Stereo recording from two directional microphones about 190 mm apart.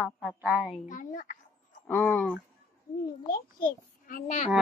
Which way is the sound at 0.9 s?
45° left (ahead or behind).